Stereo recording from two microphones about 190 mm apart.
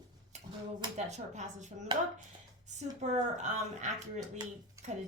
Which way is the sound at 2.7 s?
35° right (ahead or behind).